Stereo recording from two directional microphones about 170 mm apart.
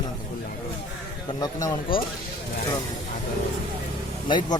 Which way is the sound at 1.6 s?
25° left (ahead or behind).